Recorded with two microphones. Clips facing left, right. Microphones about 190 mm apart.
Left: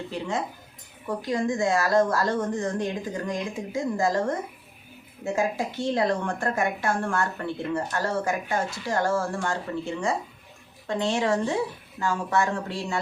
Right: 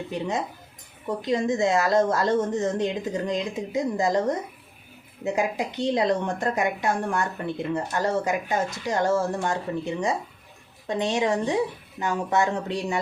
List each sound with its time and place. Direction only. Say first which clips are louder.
0.1 s a woman's voice: right 2 dB; 20° right (ahead or behind)